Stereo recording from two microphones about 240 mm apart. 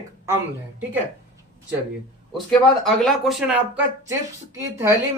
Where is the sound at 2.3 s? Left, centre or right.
Centre.